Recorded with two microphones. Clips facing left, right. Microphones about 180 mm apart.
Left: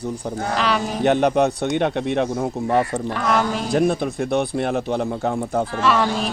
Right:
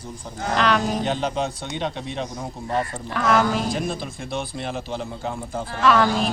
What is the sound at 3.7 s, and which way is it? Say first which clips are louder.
Speech: left 8 dB; 60° left (ahead or behind).